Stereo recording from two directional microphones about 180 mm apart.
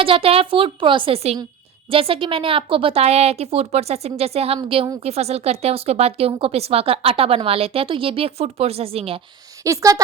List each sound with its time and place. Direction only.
0.0 s speech: 30° right (ahead or behind)
9.6 s a woman's voice: 20° right (ahead or behind)